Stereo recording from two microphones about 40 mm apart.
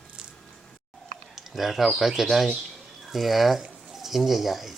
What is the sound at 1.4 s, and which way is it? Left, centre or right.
Speech, centre.